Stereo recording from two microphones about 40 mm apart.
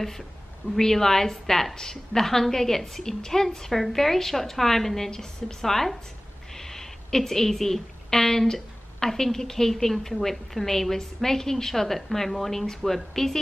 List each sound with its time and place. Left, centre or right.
0.7 s speech: centre